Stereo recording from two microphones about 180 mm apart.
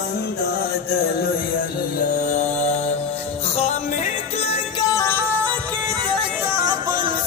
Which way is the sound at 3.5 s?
35° left (ahead or behind).